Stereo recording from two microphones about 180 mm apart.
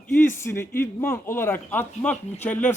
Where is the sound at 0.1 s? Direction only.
15° left (ahead or behind).